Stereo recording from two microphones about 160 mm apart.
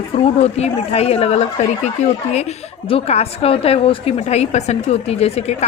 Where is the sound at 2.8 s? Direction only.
40° left (ahead or behind).